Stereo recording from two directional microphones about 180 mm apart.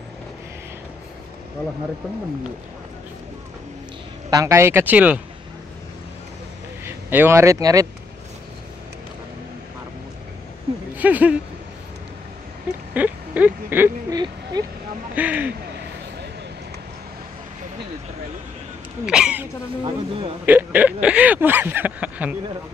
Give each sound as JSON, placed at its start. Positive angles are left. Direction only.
{"t": 4.3, "sound": "speech", "side_deg": -15}
{"t": 6.8, "sound": "speech", "side_deg": -10}
{"t": 11.0, "sound": "a sound", "side_deg": -10}
{"t": 12.9, "sound": "a sound", "side_deg": -10}
{"t": 14.1, "sound": "a sound", "side_deg": -20}
{"t": 15.1, "sound": "speech", "side_deg": -10}
{"t": 19.0, "sound": "speech", "side_deg": -5}
{"t": 19.8, "sound": "speech", "side_deg": -30}
{"t": 20.4, "sound": "speech", "side_deg": -10}